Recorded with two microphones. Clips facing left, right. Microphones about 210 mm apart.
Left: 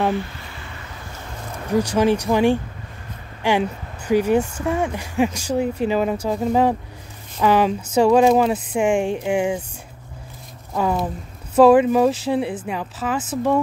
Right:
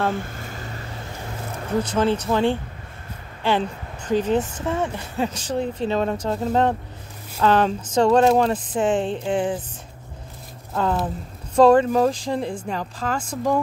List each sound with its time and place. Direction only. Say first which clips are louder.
0.1 s vehicle: left 3 dB; 45° right (ahead or behind)
1.7 s speech: left 3 dB; 10° left (ahead or behind)
10.7 s speech: left 1 dB; 10° left (ahead or behind)